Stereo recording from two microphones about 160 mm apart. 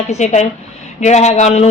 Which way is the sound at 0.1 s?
45° left (ahead or behind).